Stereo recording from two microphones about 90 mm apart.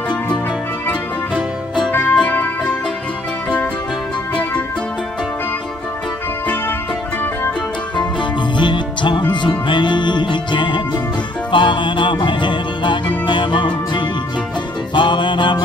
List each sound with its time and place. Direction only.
1.9 s music: 25° left (ahead or behind)
7.9 s music: 60° left (ahead or behind)